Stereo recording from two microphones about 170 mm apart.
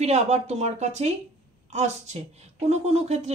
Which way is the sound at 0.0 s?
40° right (ahead or behind).